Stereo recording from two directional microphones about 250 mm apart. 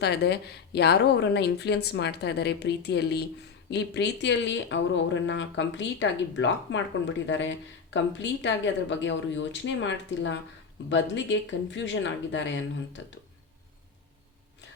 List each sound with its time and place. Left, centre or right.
0.0 s a woman's voice: left